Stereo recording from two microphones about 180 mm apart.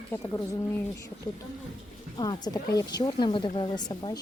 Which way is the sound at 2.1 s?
25° left (ahead or behind).